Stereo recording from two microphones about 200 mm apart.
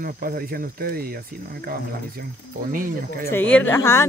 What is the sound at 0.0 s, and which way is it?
Speech, 45° right (ahead or behind).